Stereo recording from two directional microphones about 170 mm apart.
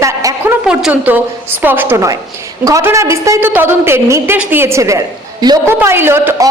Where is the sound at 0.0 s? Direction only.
20° right (ahead or behind).